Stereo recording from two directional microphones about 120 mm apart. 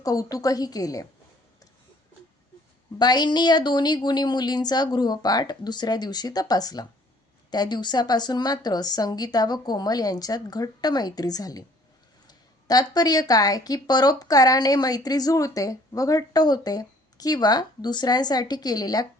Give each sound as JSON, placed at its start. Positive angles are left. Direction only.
{"t": 0.0, "sound": "speech", "side_deg": 30}
{"t": 3.0, "sound": "speech", "side_deg": 35}